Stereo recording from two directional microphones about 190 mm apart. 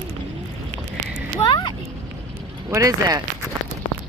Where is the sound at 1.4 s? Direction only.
25° left (ahead or behind).